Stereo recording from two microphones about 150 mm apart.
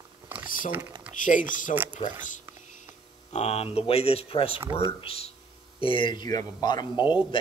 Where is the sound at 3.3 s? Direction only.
45° left (ahead or behind).